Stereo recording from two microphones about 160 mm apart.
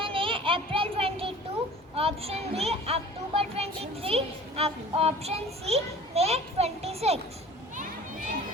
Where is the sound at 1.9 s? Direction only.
40° right (ahead or behind).